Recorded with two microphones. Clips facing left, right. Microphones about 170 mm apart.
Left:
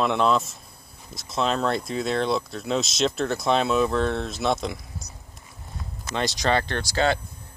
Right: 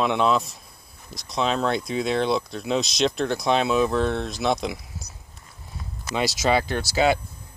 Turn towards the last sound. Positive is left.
turn(degrees=-10)  # may be behind; listen again after turning